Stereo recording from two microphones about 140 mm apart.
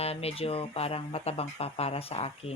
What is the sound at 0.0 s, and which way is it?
Speech, 45° left (ahead or behind).